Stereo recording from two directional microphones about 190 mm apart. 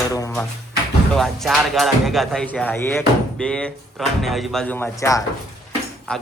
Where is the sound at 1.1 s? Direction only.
Centre (ahead or behind); by 5.2 s 15° left (ahead or behind).